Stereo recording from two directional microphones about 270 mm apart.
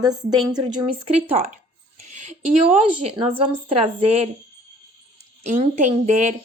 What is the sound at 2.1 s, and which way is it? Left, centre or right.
A woman's voice, right.